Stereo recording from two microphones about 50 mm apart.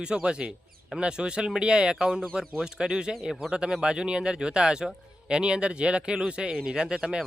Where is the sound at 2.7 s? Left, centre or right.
Centre.